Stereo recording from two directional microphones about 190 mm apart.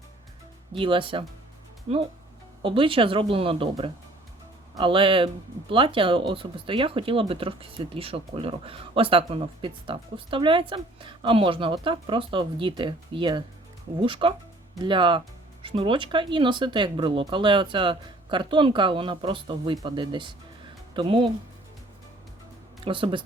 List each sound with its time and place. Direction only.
0.7 s speech: 25° right (ahead or behind)
22.8 s speech: 25° right (ahead or behind)